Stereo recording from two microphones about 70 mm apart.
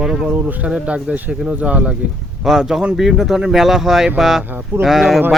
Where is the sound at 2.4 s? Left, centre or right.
Centre.